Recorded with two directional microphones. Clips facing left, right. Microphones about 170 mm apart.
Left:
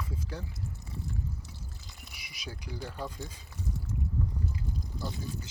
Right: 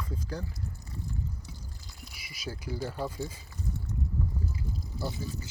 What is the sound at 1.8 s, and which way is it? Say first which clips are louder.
Speech: right 2 dB; centre (ahead or behind).